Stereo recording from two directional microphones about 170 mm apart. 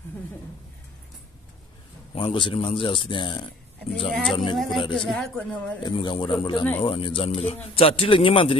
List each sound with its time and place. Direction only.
2.1 s speech: 30° left (ahead or behind)
4.1 s speech: centre (ahead or behind)
5.5 s a man's voice: 25° left (ahead or behind)